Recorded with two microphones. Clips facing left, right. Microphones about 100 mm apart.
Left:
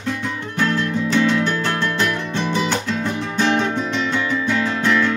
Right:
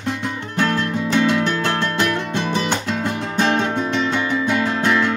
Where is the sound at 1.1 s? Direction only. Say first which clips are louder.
Even; 20° right (ahead or behind).